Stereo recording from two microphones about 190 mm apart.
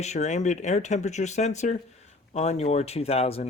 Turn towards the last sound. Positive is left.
turn(degrees=30)  # may be behind; listen again after turning